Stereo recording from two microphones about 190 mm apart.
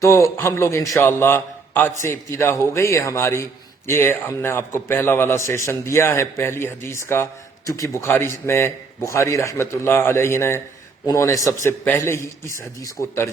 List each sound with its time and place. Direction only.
0.0 s a man's voice: 15° left (ahead or behind)